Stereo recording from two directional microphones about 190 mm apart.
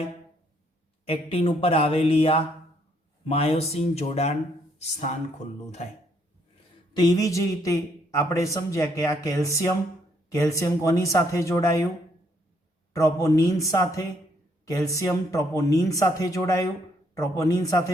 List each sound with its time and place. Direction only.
1.0 s speech: 30° left (ahead or behind)
6.9 s speech: 20° left (ahead or behind)
12.9 s speech: 15° left (ahead or behind)